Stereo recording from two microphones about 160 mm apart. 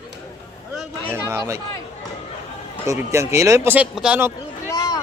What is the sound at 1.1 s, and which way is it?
Speech, 20° right (ahead or behind).